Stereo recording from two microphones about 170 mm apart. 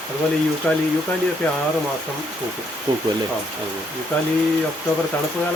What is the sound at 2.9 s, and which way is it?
Speech, 30° right (ahead or behind).